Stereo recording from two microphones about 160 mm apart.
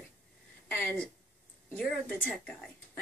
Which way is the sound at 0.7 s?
5° left (ahead or behind).